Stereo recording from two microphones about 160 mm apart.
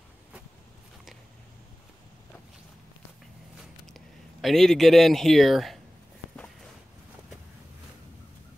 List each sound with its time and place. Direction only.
3.8 s speech: centre (ahead or behind)